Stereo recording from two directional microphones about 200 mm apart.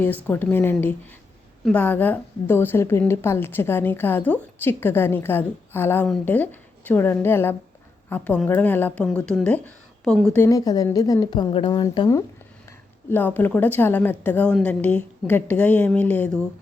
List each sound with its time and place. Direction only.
0.3 s a woman's voice: 10° left (ahead or behind)